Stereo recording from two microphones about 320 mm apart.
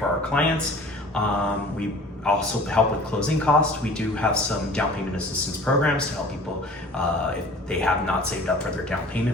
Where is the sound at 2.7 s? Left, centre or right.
Centre.